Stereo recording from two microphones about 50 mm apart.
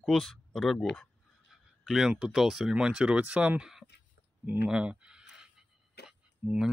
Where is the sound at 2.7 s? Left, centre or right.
Right.